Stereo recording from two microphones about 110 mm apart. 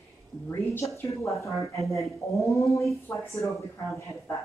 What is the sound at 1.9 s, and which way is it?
Speech, 30° left (ahead or behind).